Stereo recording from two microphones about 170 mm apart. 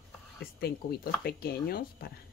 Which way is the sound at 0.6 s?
65° left (ahead or behind).